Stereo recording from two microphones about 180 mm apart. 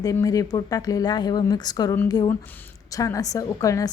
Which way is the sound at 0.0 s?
20° left (ahead or behind).